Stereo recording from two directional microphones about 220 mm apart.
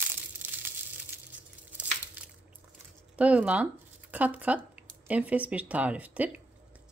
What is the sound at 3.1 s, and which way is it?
Speech, 5° right (ahead or behind).